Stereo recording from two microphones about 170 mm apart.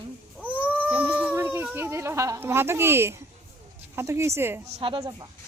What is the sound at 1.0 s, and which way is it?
A woman's voice, 10° right (ahead or behind).